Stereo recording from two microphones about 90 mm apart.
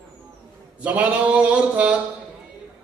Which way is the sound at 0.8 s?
15° right (ahead or behind).